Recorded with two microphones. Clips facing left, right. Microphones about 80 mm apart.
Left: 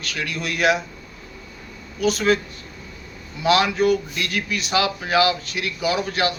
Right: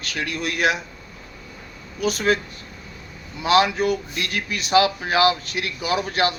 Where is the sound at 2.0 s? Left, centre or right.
Right.